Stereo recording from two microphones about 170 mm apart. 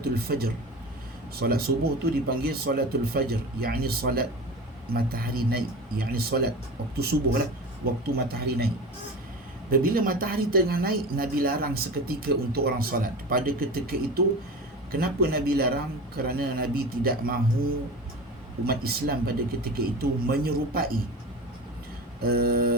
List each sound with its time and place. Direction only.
0.3 s speech: 65° right (ahead or behind)
9.7 s speech: 60° right (ahead or behind)
14.2 s speech: 70° right (ahead or behind)
22.2 s speech: 65° right (ahead or behind)